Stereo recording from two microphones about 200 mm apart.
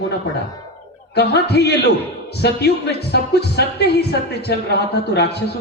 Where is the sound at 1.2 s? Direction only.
55° left (ahead or behind).